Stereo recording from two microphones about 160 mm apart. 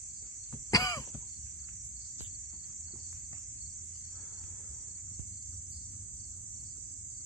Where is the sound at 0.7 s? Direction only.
25° left (ahead or behind).